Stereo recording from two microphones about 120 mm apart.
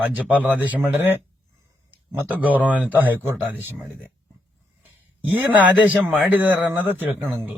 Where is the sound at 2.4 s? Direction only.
10° right (ahead or behind).